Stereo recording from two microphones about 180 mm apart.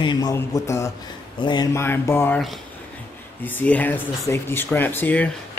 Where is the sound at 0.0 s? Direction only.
25° left (ahead or behind).